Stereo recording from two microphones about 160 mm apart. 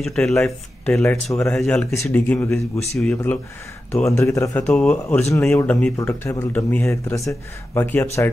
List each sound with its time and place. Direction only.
0.0 s speech: 5° left (ahead or behind); by 4.5 s 20° left (ahead or behind)
4.6 s speech: 5° left (ahead or behind)